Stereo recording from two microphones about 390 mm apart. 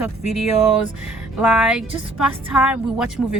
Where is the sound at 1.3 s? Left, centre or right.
Centre.